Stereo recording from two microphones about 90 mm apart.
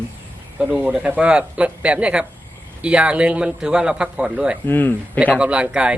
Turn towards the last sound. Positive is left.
turn(degrees=-10)  # may be behind; listen again after turning